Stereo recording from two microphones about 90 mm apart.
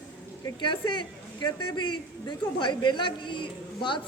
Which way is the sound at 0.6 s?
60° left (ahead or behind).